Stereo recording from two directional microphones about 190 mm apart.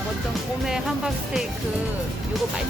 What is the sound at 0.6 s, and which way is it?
Speech, centre (ahead or behind).